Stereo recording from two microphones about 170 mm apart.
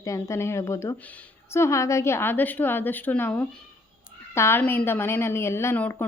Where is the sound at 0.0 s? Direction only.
20° left (ahead or behind).